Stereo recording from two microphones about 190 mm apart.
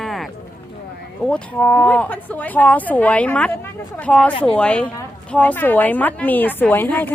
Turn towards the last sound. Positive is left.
turn(degrees=10)  # may be behind; listen again after turning